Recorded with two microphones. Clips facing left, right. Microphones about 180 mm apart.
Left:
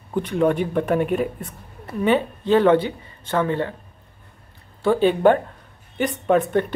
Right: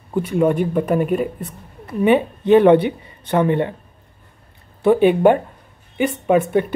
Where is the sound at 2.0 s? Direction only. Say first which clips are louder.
Right 5 dB; 15° right (ahead or behind).